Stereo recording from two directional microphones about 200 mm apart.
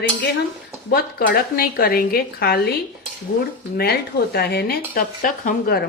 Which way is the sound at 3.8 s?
50° left (ahead or behind).